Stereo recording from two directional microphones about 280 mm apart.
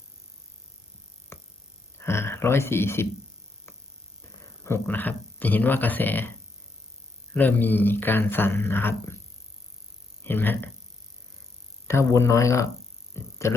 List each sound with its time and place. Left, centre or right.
1.3 s music: centre
2.0 s a sound: centre
4.6 s speech: centre
7.3 s speech: centre
10.2 s speech: centre
11.9 s speech: centre